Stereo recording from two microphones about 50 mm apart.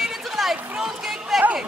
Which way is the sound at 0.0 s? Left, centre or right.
Centre.